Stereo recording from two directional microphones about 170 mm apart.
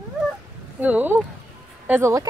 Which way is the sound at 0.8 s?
10° right (ahead or behind).